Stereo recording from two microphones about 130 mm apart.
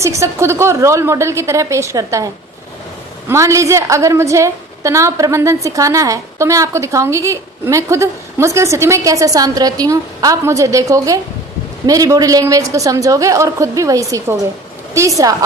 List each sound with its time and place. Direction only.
0.0 s a woman's voice: 25° right (ahead or behind)